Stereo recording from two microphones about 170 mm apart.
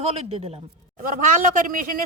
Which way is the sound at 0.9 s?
50° right (ahead or behind).